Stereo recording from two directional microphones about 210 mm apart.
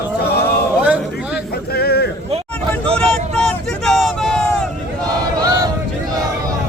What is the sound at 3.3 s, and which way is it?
Vehicle, centre (ahead or behind).